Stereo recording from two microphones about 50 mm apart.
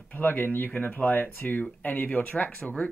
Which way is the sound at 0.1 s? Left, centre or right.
Left.